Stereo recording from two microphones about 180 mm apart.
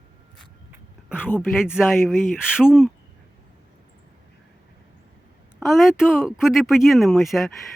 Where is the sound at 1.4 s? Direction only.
5° right (ahead or behind).